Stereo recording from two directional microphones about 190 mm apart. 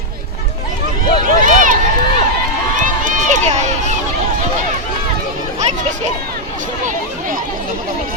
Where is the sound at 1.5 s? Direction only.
45° right (ahead or behind).